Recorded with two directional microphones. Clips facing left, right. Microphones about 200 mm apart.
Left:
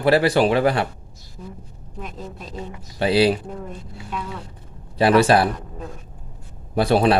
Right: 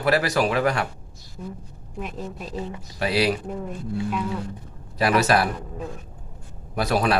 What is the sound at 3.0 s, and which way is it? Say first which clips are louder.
Speech: left 5 dB; 30° left (ahead or behind).